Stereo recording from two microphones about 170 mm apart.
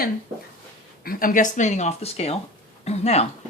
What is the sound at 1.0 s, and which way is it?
Speech, 55° left (ahead or behind).